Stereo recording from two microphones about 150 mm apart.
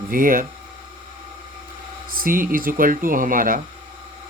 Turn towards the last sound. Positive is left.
turn(degrees=-65)  # may be behind; listen again after turning